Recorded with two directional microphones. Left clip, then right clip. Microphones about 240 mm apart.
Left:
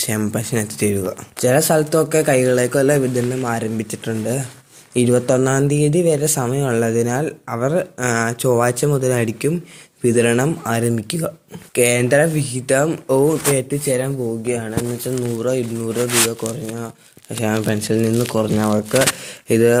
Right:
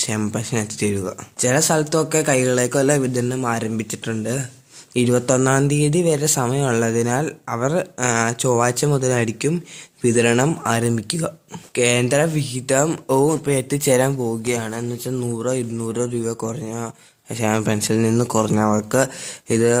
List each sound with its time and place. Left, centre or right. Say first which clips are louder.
0.0 s speech: left 2 dB; centre